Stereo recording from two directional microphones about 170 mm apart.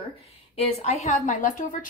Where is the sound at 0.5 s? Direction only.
40° left (ahead or behind).